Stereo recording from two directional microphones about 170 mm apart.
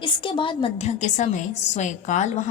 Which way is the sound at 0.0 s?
30° left (ahead or behind).